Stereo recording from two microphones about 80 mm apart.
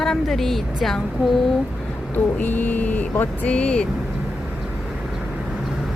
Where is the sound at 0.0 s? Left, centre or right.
Centre.